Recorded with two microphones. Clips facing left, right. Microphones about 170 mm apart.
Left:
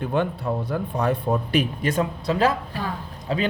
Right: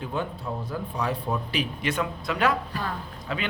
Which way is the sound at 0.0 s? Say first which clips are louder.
Left 7 dB; 65° left (ahead or behind).